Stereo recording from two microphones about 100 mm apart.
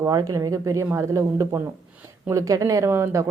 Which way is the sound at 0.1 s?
40° right (ahead or behind).